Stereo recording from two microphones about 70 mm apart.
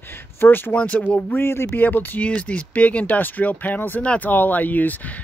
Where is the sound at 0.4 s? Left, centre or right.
Left.